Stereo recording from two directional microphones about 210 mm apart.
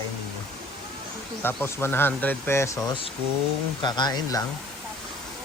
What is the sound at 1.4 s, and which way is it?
Speech, 10° left (ahead or behind).